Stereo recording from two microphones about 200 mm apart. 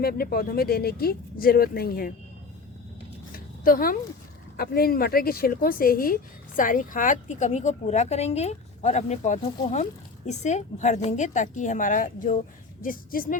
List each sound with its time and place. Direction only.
0.0 s speech: 50° left (ahead or behind)
3.3 s a sound: 45° left (ahead or behind)
4.5 s a woman's voice: 50° left (ahead or behind)